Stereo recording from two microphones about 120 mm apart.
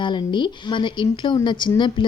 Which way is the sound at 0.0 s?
40° left (ahead or behind).